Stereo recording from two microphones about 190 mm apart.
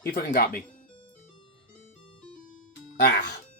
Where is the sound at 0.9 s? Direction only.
25° left (ahead or behind).